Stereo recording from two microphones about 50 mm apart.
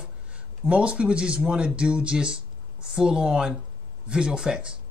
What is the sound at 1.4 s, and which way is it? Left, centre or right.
Speech, centre.